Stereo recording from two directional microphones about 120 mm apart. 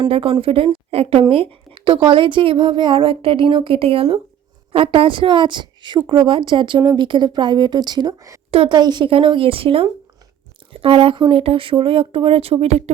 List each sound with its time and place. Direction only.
0.1 s a woman's voice: 50° right (ahead or behind); by 8.4 s 30° right (ahead or behind)
8.4 s a woman's voice: 50° right (ahead or behind)